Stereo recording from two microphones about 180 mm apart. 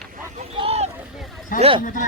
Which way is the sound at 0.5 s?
30° right (ahead or behind).